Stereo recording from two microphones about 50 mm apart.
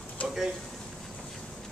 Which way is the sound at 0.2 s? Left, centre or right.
Left.